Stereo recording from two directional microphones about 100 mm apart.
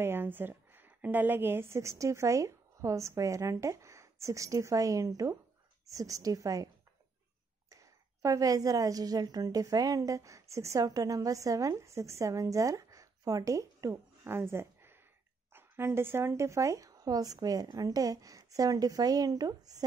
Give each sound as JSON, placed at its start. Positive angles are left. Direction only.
{"t": 0.0, "sound": "a woman's voice", "side_deg": -20}
{"t": 7.7, "sound": "a woman's voice", "side_deg": -35}
{"t": 14.2, "sound": "a sound", "side_deg": -25}
{"t": 15.5, "sound": "a woman's voice", "side_deg": -25}